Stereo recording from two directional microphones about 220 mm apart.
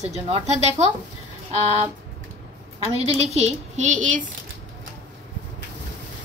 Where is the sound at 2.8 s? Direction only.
25° right (ahead or behind).